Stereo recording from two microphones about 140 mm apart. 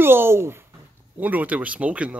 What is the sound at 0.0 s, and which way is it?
Speech, 15° right (ahead or behind).